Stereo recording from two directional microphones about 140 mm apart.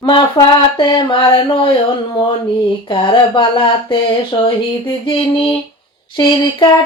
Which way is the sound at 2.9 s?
35° left (ahead or behind).